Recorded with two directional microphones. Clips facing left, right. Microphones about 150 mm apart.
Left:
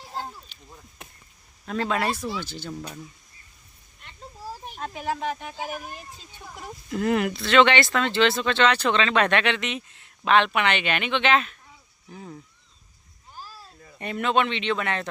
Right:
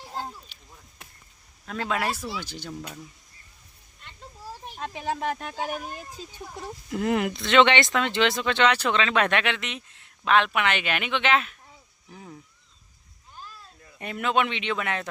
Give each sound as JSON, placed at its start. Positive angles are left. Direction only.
{"t": 1.6, "sound": "speech", "side_deg": 0}
{"t": 2.6, "sound": "speech", "side_deg": 0}
{"t": 6.9, "sound": "speech", "side_deg": -20}
{"t": 13.3, "sound": "a sound", "side_deg": 35}
{"t": 14.0, "sound": "speech", "side_deg": -5}